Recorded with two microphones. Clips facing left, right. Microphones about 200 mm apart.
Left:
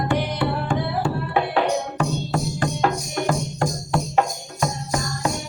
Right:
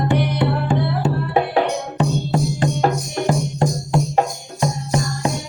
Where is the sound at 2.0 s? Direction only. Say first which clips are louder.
Right 4 dB; 25° right (ahead or behind).